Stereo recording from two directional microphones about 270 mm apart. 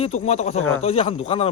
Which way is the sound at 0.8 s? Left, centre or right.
Left.